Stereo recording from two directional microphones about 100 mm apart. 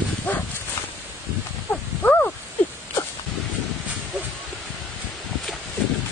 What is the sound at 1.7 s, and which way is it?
Wild animals, 15° left (ahead or behind).